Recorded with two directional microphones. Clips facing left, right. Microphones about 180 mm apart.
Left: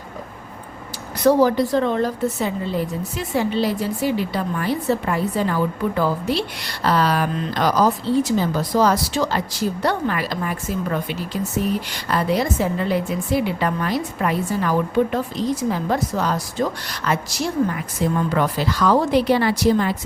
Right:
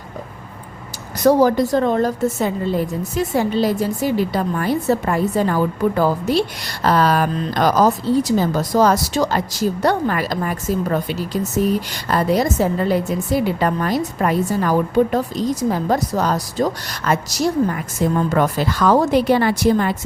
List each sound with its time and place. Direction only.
1.2 s a woman's voice: 45° right (ahead or behind)